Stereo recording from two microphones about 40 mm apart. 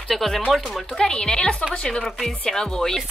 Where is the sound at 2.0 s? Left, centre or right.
Centre.